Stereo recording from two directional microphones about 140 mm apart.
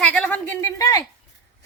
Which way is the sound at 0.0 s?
10° left (ahead or behind).